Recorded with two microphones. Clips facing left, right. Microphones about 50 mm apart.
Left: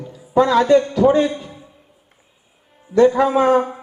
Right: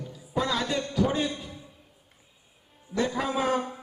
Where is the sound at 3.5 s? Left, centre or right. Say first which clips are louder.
Left 12 dB; left.